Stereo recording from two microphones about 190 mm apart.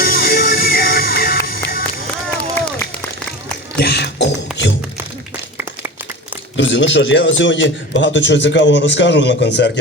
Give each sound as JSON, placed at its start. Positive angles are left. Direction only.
{"t": 0.0, "sound": "music", "side_deg": 50}
{"t": 2.4, "sound": "run", "side_deg": 5}
{"t": 3.8, "sound": "a sound", "side_deg": 60}
{"t": 6.6, "sound": "a man's voice", "side_deg": 70}